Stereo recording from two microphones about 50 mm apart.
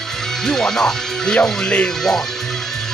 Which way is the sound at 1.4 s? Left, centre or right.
Left.